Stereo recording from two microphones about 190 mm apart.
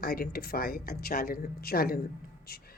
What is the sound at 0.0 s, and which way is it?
Speech, 55° left (ahead or behind).